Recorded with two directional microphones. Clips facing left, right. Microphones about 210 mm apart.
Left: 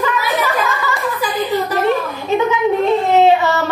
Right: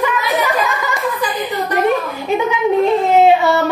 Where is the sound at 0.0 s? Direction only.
15° right (ahead or behind).